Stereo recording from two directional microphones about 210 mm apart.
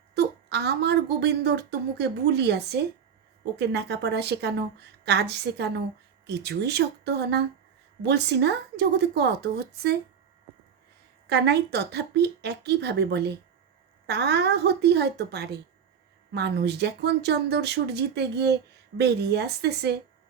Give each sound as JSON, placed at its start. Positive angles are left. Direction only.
{"t": 0.1, "sound": "a woman's voice", "side_deg": -50}
{"t": 11.3, "sound": "a woman's voice", "side_deg": -50}